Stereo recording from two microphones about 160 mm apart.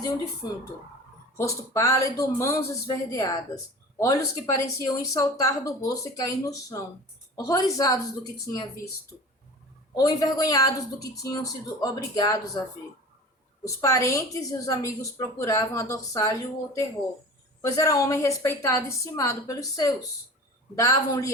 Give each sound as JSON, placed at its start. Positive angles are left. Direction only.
{"t": 1.4, "sound": "speech", "side_deg": 20}
{"t": 9.9, "sound": "speech", "side_deg": 25}
{"t": 13.7, "sound": "speech", "side_deg": 20}